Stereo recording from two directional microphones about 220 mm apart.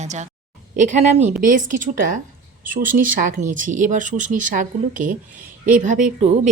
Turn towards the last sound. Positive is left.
turn(degrees=-35)  # may be behind; listen again after turning